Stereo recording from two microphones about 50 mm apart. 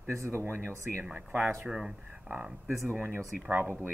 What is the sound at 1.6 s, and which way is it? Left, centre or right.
Speech, centre.